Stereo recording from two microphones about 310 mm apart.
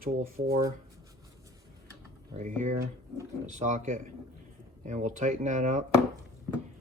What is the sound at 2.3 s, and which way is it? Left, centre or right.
Speech, right.